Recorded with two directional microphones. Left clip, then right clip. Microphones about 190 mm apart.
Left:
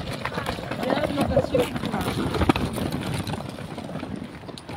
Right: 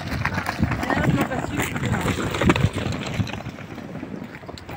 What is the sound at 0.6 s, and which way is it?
Vehicle, 45° left (ahead or behind).